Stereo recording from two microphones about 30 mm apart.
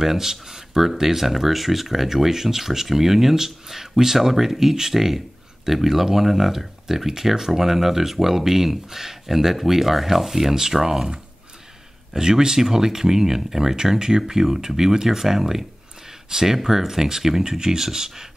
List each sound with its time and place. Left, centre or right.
0.0 s speech: centre
12.1 s speech: right